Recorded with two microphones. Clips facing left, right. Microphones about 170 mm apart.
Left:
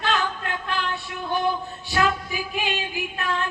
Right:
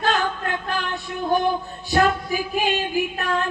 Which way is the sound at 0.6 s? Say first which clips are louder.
Right 1 dB; 40° right (ahead or behind).